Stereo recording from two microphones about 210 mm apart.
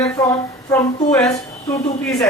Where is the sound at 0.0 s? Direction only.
15° left (ahead or behind).